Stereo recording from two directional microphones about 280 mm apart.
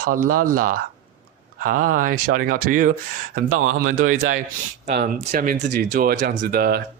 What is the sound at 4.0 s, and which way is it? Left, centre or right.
Speech, right.